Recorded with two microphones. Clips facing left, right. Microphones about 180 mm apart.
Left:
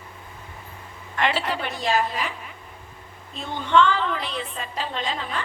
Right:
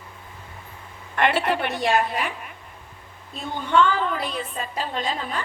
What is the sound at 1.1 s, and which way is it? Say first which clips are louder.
A woman's voice: right 3 dB; 55° right (ahead or behind).